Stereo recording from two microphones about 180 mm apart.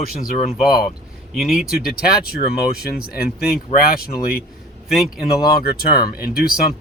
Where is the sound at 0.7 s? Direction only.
55° left (ahead or behind).